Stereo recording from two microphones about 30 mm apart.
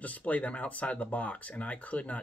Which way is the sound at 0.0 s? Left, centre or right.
Left.